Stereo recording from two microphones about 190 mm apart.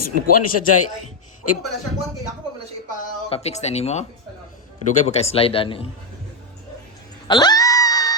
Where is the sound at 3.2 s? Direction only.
30° left (ahead or behind).